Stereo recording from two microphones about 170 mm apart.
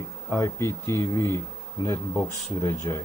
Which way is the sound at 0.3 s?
15° left (ahead or behind).